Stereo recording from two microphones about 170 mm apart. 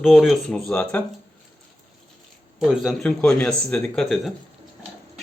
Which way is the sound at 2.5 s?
Centre (ahead or behind).